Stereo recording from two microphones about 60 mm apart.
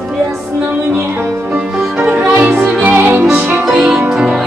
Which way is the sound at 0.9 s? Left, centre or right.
Right.